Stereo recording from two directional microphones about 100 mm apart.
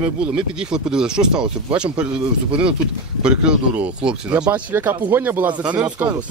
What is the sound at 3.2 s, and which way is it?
Speech, 10° right (ahead or behind).